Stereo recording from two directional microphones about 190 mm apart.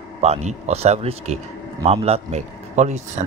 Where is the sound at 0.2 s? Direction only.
35° right (ahead or behind).